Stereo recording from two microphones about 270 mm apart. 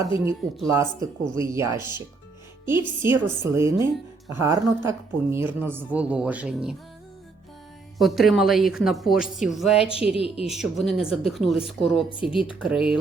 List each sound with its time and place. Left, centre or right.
0.7 s a woman's voice: centre
7.9 s a woman's voice: centre
10.2 s speech: left
10.4 s a woman's voice: centre